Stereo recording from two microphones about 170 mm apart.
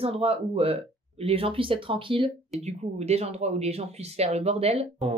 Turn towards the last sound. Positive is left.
turn(degrees=-35)  # may be behind; listen again after turning